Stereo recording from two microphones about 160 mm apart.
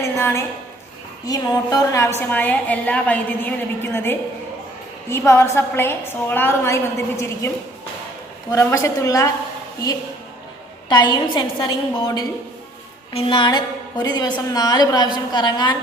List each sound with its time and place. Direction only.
0.0 s a woman's voice: 15° left (ahead or behind)
10.8 s a woman's voice: 30° left (ahead or behind)